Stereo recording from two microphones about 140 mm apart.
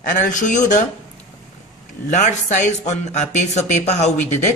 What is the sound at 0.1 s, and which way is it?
Speech, 65° left (ahead or behind).